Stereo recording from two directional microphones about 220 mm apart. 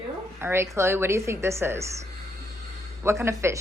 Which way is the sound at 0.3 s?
10° right (ahead or behind).